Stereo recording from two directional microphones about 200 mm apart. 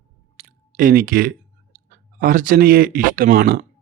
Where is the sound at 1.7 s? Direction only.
45° right (ahead or behind).